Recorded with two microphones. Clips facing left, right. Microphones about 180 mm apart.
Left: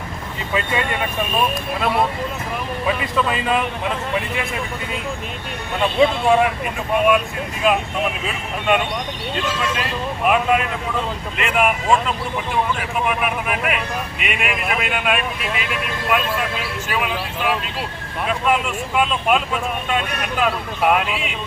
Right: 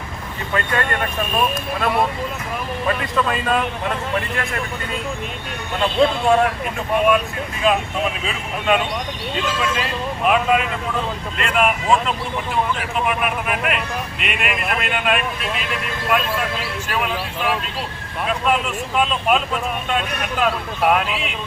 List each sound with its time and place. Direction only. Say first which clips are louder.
0.5 s speech: even; 5° left (ahead or behind)
5.8 s speech: left 1 dB; 5° left (ahead or behind)